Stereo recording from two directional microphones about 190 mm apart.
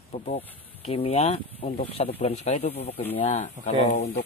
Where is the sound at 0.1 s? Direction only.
35° left (ahead or behind).